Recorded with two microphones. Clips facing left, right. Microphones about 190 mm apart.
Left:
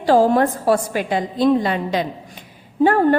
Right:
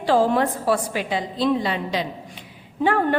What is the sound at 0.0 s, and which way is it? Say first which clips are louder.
A woman's voice: left 4 dB; 40° left (ahead or behind).